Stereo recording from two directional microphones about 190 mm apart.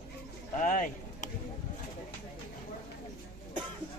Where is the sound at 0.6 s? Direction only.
40° left (ahead or behind).